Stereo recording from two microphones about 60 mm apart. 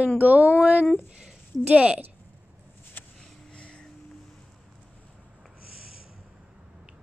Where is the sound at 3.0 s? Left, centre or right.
Left.